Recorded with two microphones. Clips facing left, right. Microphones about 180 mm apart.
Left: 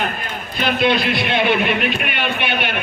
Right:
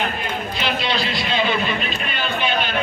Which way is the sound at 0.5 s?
55° left (ahead or behind).